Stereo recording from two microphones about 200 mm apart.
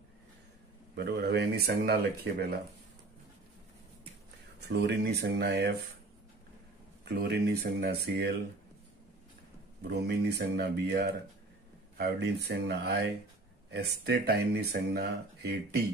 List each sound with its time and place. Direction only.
0.9 s speech: 60° right (ahead or behind)
4.6 s speech: 55° right (ahead or behind)
7.1 s speech: 55° right (ahead or behind)
9.8 s speech: 55° right (ahead or behind)